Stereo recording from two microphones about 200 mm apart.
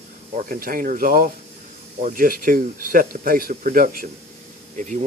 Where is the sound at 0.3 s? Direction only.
45° right (ahead or behind).